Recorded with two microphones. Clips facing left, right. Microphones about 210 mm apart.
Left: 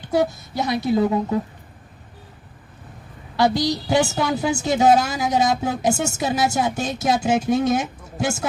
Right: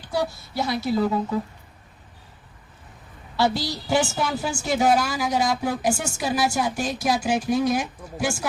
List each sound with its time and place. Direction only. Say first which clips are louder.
0.1 s a woman's voice: left 6 dB; 20° left (ahead or behind)
3.3 s a woman's voice: left 4 dB; 15° left (ahead or behind)